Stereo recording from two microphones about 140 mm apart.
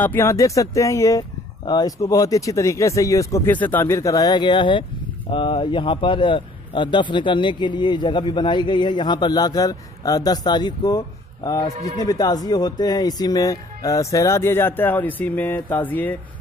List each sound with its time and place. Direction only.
0.0 s a man's voice: 15° left (ahead or behind)